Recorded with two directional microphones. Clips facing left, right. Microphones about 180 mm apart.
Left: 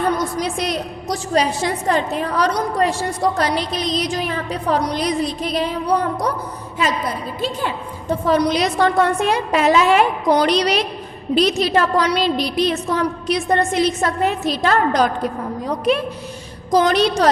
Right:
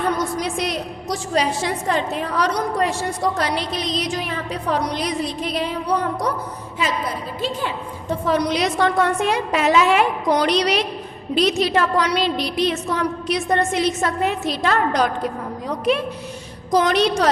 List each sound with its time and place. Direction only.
0.3 s a woman's voice: 40° left (ahead or behind)
8.3 s a woman's voice: 35° left (ahead or behind)